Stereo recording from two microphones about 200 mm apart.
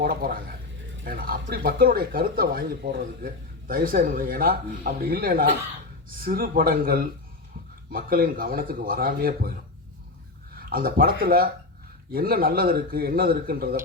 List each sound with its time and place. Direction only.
0.0 s speech: 45° right (ahead or behind)
10.5 s speech: 45° right (ahead or behind)